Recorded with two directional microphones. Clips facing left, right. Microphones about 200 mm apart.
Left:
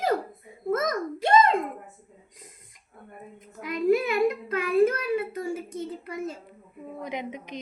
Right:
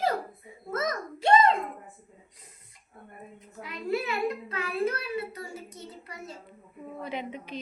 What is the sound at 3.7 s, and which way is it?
Child singing, 45° left (ahead or behind).